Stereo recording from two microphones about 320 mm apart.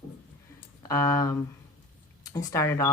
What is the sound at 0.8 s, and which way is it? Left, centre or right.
Speech, centre.